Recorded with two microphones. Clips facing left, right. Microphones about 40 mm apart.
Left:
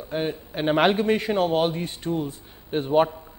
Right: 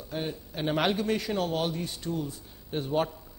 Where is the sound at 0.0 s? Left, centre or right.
Left.